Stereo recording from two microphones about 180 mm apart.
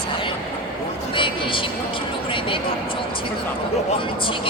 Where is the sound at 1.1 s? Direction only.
30° left (ahead or behind).